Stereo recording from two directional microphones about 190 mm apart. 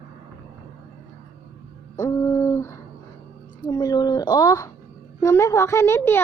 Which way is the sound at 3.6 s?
20° left (ahead or behind).